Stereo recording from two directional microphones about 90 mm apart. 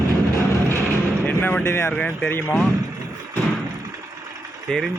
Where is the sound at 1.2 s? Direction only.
20° left (ahead or behind).